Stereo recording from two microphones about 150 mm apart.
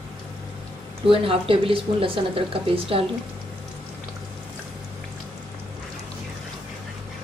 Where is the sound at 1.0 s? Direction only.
35° right (ahead or behind).